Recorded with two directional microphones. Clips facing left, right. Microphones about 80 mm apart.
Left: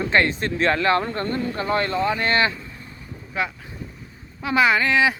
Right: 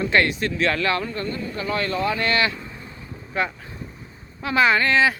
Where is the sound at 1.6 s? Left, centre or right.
Left.